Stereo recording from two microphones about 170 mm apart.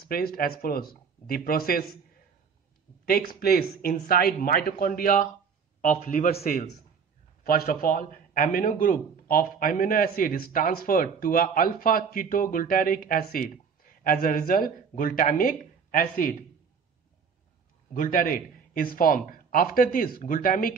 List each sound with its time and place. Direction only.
0.1 s a man's voice: 60° left (ahead or behind)
3.1 s a man's voice: 60° left (ahead or behind)
17.9 s a man's voice: 55° left (ahead or behind)